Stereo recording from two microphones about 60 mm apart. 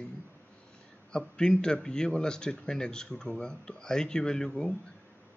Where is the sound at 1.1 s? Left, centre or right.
Centre.